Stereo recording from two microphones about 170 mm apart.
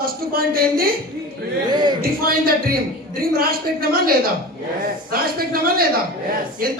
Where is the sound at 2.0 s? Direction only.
60° right (ahead or behind).